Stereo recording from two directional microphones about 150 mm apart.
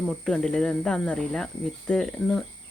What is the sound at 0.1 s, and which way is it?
Speech, 5° left (ahead or behind).